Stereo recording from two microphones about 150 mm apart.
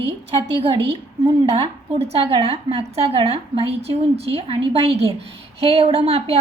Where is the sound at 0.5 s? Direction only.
40° right (ahead or behind).